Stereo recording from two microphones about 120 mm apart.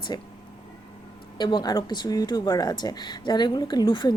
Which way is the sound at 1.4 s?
40° left (ahead or behind).